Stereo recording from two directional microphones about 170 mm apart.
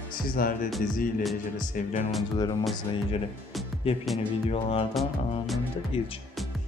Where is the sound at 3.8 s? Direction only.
35° left (ahead or behind).